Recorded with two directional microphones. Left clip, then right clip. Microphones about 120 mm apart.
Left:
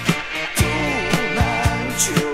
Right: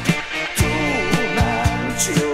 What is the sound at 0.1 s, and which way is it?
Music, centre (ahead or behind).